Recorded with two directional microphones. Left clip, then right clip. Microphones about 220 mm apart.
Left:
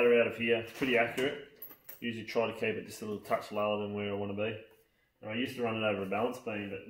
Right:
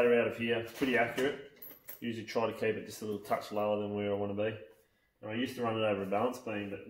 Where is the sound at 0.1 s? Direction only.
20° left (ahead or behind).